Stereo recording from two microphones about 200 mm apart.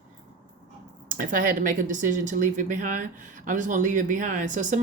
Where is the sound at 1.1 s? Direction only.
40° right (ahead or behind).